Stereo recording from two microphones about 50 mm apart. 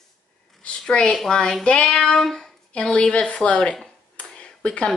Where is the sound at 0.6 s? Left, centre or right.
Left.